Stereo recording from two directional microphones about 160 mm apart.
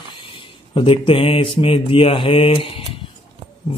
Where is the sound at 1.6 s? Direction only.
35° left (ahead or behind).